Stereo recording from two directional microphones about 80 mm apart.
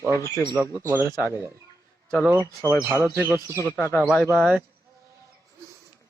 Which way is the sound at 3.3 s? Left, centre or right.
Right.